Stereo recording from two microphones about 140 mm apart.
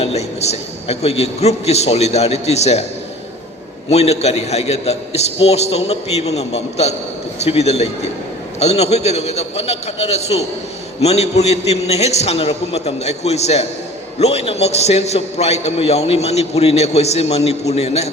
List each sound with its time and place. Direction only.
0.0 s a man's voice: 50° left (ahead or behind)
3.8 s a man's voice: 50° left (ahead or behind)